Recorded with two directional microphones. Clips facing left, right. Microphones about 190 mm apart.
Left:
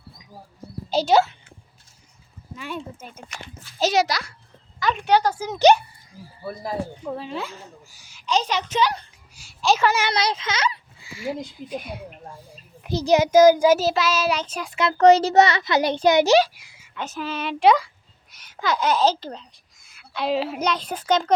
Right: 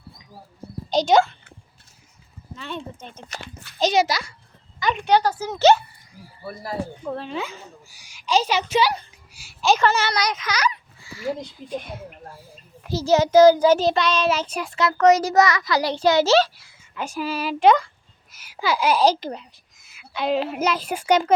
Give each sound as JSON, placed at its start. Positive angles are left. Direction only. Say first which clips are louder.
{"t": 0.9, "sound": "a woman's voice", "louder": "right 1 dB", "side_deg": 5}
{"t": 2.6, "sound": "a child's voice", "louder": "even", "side_deg": 10}
{"t": 3.4, "sound": "a child's voice", "louder": "right 2 dB", "side_deg": -65}
{"t": 3.8, "sound": "a woman's voice", "louder": "right 1 dB", "side_deg": 5}
{"t": 5.4, "sound": "a child's voice", "louder": "even", "side_deg": 15}
{"t": 7.0, "sound": "a woman's voice", "louder": "right 1 dB", "side_deg": 10}
{"t": 10.1, "sound": "speech", "louder": "left 1 dB", "side_deg": 25}
{"t": 11.1, "sound": "speech", "louder": "right 2 dB", "side_deg": 15}
{"t": 11.7, "sound": "a woman's voice", "louder": "right 2 dB", "side_deg": 0}
{"t": 12.8, "sound": "a child's voice", "louder": "even", "side_deg": 15}
{"t": 14.3, "sound": "a woman's voice", "louder": "right 2 dB", "side_deg": -5}
{"t": 14.8, "sound": "a child's voice", "louder": "left 2 dB", "side_deg": 30}
{"t": 16.9, "sound": "a child's voice", "louder": "right 2 dB", "side_deg": -10}
{"t": 19.9, "sound": "a woman's voice", "louder": "right 1 dB", "side_deg": -5}